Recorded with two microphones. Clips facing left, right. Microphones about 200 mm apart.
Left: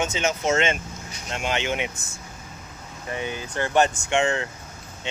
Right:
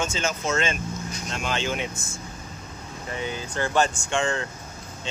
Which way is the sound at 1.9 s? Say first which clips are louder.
Right 4 dB; 40° left (ahead or behind).